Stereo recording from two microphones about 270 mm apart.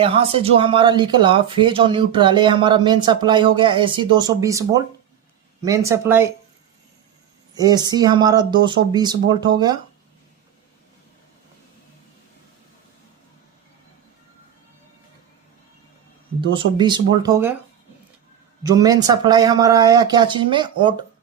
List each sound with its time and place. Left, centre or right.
0.0 s speech: right
7.5 s speech: centre
16.5 s speech: centre
18.6 s speech: centre